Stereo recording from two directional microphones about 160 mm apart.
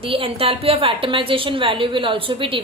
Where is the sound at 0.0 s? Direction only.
35° right (ahead or behind).